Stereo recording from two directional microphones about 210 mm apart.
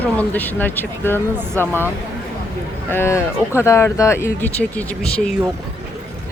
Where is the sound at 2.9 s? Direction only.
10° left (ahead or behind).